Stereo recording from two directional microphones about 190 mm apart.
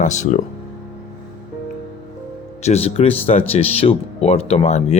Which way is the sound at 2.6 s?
35° left (ahead or behind).